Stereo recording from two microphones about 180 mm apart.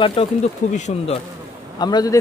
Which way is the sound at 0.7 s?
40° left (ahead or behind).